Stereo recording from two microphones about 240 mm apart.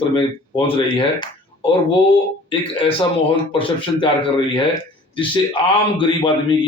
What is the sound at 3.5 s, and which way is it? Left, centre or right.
A man's voice, left.